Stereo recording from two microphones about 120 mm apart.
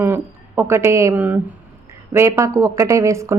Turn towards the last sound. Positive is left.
turn(degrees=-25)  # may be behind; listen again after turning